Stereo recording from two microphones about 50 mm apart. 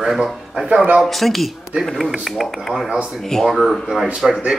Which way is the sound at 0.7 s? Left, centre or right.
Right.